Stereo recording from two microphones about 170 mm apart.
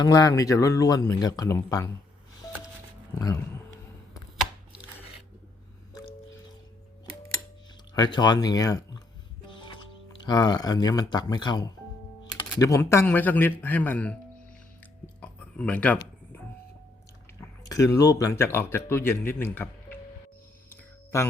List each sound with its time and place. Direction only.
0.0 s a man's voice: 20° left (ahead or behind)
3.2 s a man's voice: 20° left (ahead or behind)
7.9 s a man's voice: 25° left (ahead or behind); by 14.2 s 10° left (ahead or behind)
15.2 s a sound: 5° left (ahead or behind)
17.7 s speech: 20° left (ahead or behind)